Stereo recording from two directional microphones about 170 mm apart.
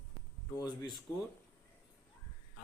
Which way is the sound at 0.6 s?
25° left (ahead or behind).